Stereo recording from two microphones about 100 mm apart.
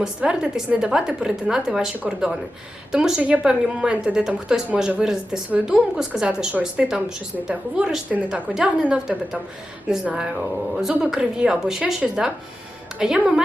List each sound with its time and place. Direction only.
0.0 s a woman's voice: 10° right (ahead or behind)